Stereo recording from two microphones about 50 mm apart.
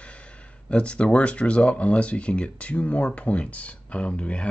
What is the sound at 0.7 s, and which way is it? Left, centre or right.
Speech, left.